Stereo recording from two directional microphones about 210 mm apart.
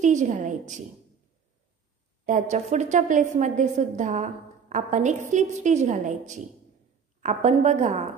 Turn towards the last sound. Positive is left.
turn(degrees=-35)  # may be behind; listen again after turning